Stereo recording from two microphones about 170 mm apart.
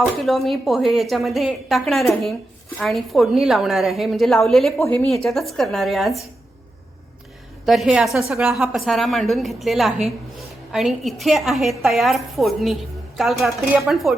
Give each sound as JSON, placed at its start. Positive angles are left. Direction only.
{"t": 0.0, "sound": "a woman's voice", "side_deg": 0}
{"t": 4.8, "sound": "speech", "side_deg": 15}
{"t": 5.0, "sound": "a woman's voice", "side_deg": 0}
{"t": 7.6, "sound": "a woman's voice", "side_deg": 0}